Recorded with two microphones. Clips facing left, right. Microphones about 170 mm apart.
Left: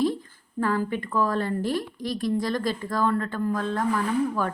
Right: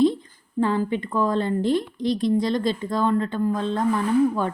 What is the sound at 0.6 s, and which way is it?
A woman's voice, 25° right (ahead or behind).